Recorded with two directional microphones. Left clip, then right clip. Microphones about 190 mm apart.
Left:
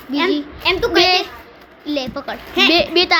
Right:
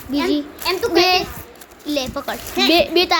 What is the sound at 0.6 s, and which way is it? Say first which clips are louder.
Speech: left 3 dB; 45° left (ahead or behind).